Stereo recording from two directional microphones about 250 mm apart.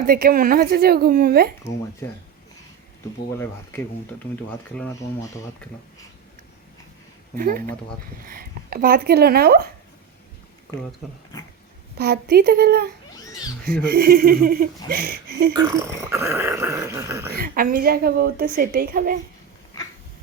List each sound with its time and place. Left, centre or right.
0.1 s a woman's voice: right
4.7 s speech: centre
7.3 s a woman's voice: right
11.9 s a woman's voice: right
15.5 s speech: centre
17.3 s a woman's voice: right